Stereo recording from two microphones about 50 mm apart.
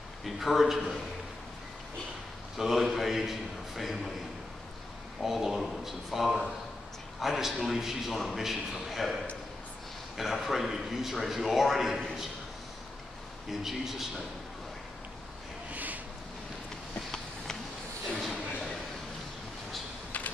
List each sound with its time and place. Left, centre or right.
0.2 s a man's voice: centre
2.5 s a man's voice: centre
5.2 s a man's voice: centre
13.5 s a man's voice: centre
15.7 s a sound: right